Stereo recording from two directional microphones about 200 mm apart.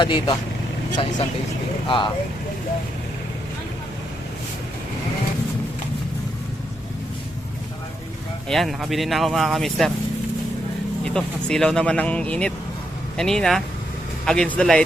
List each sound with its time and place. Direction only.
0.0 s speech: 25° left (ahead or behind)
1.9 s speech: 25° left (ahead or behind)
8.4 s speech: centre (ahead or behind)
11.0 s speech: 5° left (ahead or behind)